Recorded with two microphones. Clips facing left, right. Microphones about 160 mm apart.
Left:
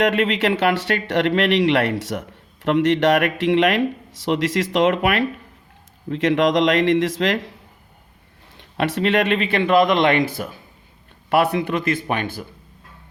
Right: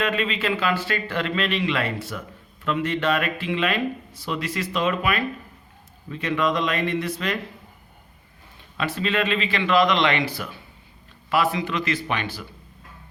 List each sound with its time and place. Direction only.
0.0 s speech: 75° left (ahead or behind)
4.3 s a man's voice: 85° left
8.5 s speech: 70° left (ahead or behind); by 10.6 s 45° left (ahead or behind)
11.3 s speech: 60° left (ahead or behind)